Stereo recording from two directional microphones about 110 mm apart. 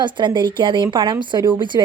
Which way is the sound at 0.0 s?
45° right (ahead or behind).